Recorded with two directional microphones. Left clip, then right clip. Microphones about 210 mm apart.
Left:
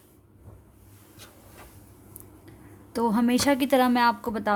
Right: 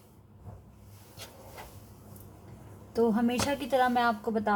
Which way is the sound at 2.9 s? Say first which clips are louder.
Left 3 dB; 55° left (ahead or behind).